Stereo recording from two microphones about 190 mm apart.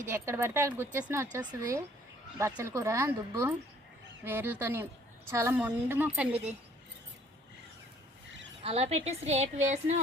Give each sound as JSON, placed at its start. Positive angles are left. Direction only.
{"t": 0.1, "sound": "a woman's voice", "side_deg": -15}
{"t": 8.6, "sound": "a woman's voice", "side_deg": -35}